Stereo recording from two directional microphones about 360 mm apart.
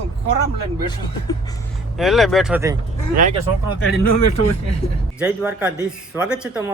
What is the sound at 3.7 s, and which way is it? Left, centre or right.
Speech, left.